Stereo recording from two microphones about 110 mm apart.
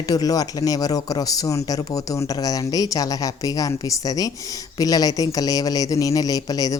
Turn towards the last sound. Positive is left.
turn(degrees=35)  # may be behind; listen again after turning